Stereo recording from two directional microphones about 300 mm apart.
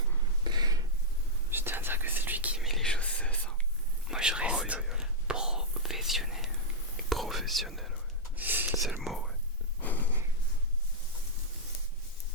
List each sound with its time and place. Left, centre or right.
0.4 s a sound: centre
1.5 s whispering: centre
8.8 s speech: centre